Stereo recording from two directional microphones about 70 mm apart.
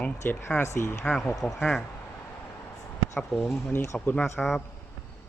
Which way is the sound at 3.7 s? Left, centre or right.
Left.